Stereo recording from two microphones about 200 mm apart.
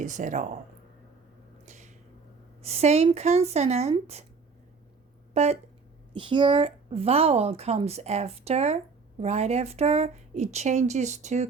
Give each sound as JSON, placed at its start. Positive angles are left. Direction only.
{"t": 0.0, "sound": "speech", "side_deg": -40}
{"t": 1.6, "sound": "a sound", "side_deg": -35}
{"t": 2.6, "sound": "speech", "side_deg": -30}
{"t": 5.3, "sound": "speech", "side_deg": -30}